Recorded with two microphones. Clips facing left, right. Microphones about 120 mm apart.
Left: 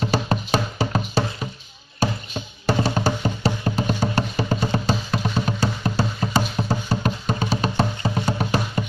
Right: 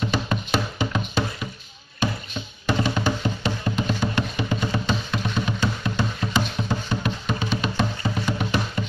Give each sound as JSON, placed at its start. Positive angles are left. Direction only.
{"t": 0.0, "sound": "music", "side_deg": 40}
{"t": 2.0, "sound": "chop", "side_deg": 40}
{"t": 2.6, "sound": "music", "side_deg": 35}